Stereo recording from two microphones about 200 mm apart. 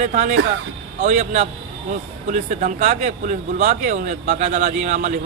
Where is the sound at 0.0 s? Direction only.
40° right (ahead or behind).